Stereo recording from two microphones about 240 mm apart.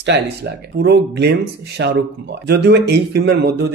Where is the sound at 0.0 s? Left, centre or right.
Right.